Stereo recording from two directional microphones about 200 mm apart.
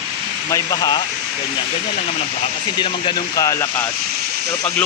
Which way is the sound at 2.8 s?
20° left (ahead or behind).